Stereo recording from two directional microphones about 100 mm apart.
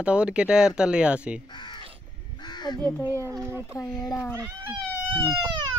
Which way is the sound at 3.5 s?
25° right (ahead or behind).